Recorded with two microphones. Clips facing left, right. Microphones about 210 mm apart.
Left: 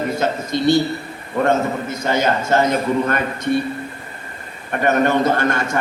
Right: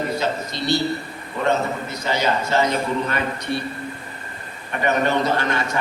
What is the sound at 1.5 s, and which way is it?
A man's voice, 50° left (ahead or behind).